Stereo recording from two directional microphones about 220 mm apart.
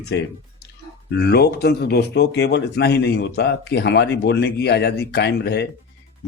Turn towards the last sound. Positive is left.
turn(degrees=50)  # may be behind; listen again after turning